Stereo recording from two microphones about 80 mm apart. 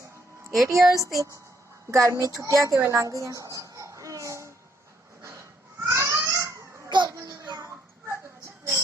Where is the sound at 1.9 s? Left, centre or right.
Right.